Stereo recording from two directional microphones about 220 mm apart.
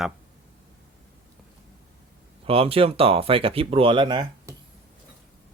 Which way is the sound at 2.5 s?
25° right (ahead or behind).